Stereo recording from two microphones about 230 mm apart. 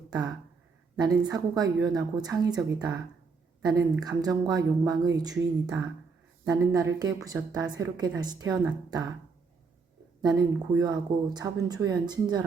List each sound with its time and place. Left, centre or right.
0.1 s a woman's voice: centre
6.4 s speech: centre
10.2 s speech: centre